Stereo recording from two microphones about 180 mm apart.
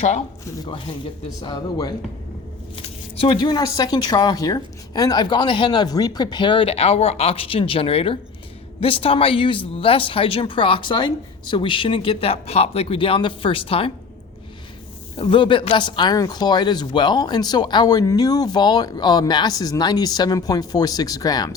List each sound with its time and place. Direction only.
0.6 s speech: 30° left (ahead or behind)
15.1 s speech: 30° left (ahead or behind)